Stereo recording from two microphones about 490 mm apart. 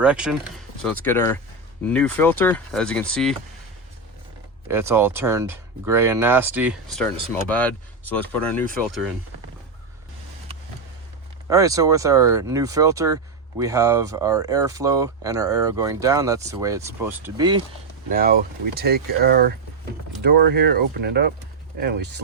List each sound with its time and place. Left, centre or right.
0.0 s speech: centre
4.7 s speech: centre
11.4 s speech: centre